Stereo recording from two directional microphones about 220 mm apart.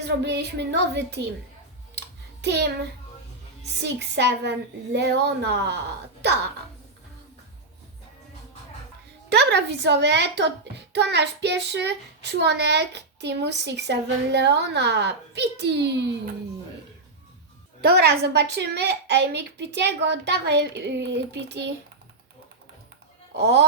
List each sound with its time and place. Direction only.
0.2 s a child's voice: 50° right (ahead or behind)
2.0 s music: 50° right (ahead or behind)
3.8 s a child's voice: 50° right (ahead or behind)
9.3 s a child's voice: 50° right (ahead or behind)
17.7 s a child's voice: 45° right (ahead or behind)
23.3 s a child's voice: 50° right (ahead or behind)